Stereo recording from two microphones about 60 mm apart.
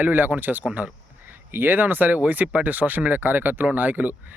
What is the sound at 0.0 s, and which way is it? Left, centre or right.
Speech, right.